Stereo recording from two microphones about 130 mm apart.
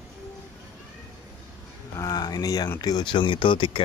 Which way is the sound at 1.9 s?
30° left (ahead or behind).